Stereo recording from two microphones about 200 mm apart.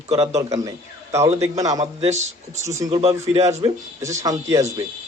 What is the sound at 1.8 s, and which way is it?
Speech, 30° right (ahead or behind).